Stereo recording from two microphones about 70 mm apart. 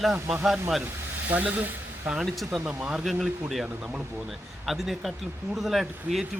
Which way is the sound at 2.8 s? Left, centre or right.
Centre.